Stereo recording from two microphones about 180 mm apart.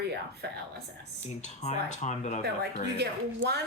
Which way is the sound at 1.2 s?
40° left (ahead or behind).